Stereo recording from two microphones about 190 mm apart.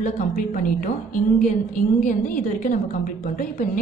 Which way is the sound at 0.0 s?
45° left (ahead or behind).